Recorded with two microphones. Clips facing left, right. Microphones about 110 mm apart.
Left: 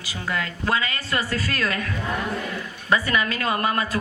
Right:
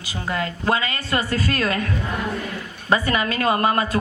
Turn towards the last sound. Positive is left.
turn(degrees=-35)  # may be behind; listen again after turning